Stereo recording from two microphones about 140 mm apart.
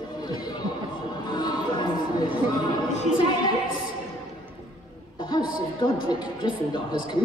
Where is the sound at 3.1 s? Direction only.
35° left (ahead or behind).